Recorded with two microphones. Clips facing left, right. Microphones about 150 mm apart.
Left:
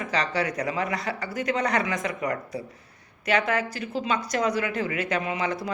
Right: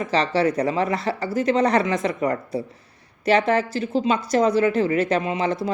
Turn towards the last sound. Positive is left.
turn(degrees=-30)  # may be behind; listen again after turning